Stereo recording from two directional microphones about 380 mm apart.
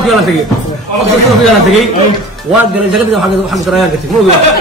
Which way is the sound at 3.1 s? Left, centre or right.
Centre.